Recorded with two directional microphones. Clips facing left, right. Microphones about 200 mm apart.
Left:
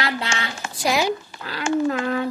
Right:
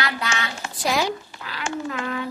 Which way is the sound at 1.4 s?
40° left (ahead or behind).